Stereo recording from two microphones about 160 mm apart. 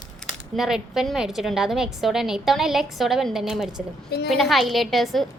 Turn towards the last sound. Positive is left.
turn(degrees=0)  # may be behind; listen again after turning